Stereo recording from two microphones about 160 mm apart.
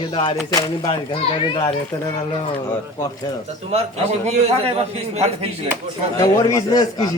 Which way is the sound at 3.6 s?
40° right (ahead or behind).